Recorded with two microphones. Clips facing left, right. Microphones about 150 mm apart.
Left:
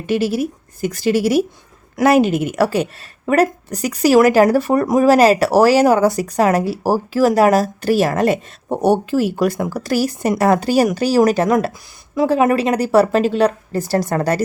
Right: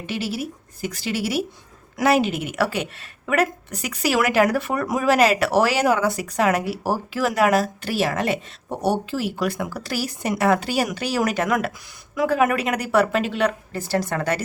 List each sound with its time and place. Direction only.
0.0 s a woman's voice: 45° left (ahead or behind)